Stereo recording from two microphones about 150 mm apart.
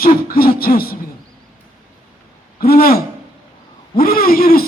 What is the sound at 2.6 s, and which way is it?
Speech, 90° left.